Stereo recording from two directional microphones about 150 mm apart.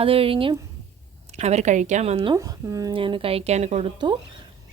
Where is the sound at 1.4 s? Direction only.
50° right (ahead or behind).